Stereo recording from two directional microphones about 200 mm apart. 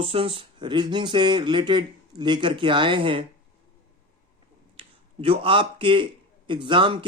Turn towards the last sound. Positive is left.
turn(degrees=-25)  # may be behind; listen again after turning